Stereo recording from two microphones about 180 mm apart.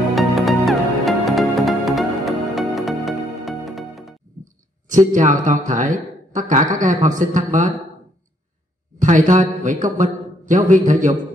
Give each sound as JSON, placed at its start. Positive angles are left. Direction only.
{"t": 0.1, "sound": "music", "side_deg": 0}
{"t": 4.8, "sound": "a man's voice", "side_deg": -45}
{"t": 9.0, "sound": "a man's voice", "side_deg": -45}